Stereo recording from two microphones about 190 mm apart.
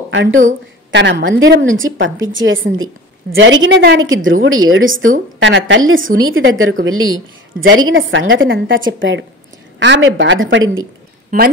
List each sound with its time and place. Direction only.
0.1 s speech: 70° right (ahead or behind)
1.2 s a woman's voice: 90° right
3.6 s a woman's voice: 65° right (ahead or behind); by 5.1 s 90° right
5.4 s a woman's voice: 75° right (ahead or behind)
9.8 s a woman's voice: 70° right (ahead or behind)
11.2 s a woman's voice: 50° right (ahead or behind)